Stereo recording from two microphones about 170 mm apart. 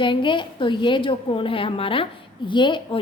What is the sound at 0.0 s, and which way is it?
A woman's voice, 30° left (ahead or behind).